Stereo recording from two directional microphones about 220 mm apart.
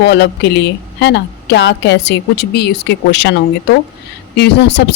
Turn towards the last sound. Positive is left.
turn(degrees=50)  # may be behind; listen again after turning